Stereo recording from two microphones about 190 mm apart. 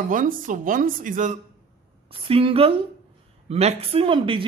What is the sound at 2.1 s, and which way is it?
A man's voice, 30° right (ahead or behind).